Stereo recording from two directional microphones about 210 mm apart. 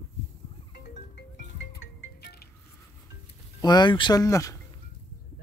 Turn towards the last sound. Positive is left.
turn(degrees=15)  # may be behind; listen again after turning